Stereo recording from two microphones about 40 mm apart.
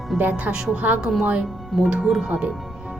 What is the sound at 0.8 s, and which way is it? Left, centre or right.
Speech, right.